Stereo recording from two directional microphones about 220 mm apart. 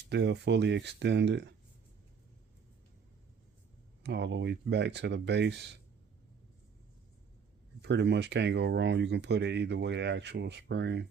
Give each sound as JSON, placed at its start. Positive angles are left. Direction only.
{"t": 0.1, "sound": "speech", "side_deg": -50}
{"t": 4.0, "sound": "speech", "side_deg": -50}
{"t": 7.8, "sound": "speech", "side_deg": -50}